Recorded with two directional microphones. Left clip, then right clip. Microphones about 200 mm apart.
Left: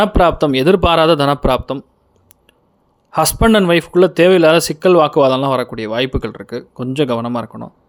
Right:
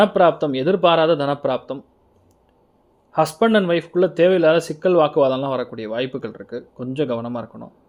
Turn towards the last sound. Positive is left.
turn(degrees=25)  # may be behind; listen again after turning